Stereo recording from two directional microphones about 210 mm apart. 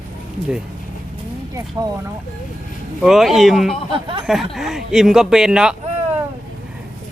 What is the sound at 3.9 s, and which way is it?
Speech, 25° right (ahead or behind).